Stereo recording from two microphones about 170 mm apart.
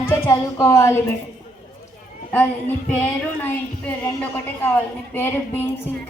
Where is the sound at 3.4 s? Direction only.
10° left (ahead or behind).